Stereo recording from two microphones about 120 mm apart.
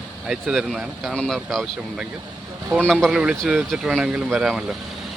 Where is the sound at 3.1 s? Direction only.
10° right (ahead or behind).